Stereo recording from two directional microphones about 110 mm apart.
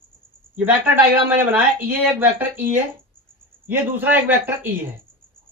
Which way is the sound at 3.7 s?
15° right (ahead or behind).